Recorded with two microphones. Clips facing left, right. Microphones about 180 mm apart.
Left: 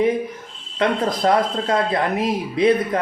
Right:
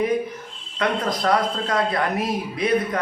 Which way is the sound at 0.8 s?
25° left (ahead or behind).